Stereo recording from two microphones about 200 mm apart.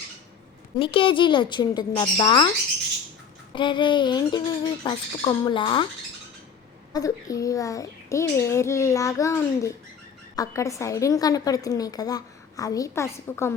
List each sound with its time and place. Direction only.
0.8 s speech: 25° left (ahead or behind)
3.5 s speech: 25° left (ahead or behind)
6.9 s a woman's voice: 15° left (ahead or behind)